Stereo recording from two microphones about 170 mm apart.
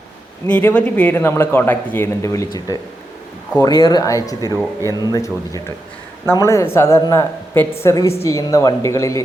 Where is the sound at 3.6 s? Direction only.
20° left (ahead or behind).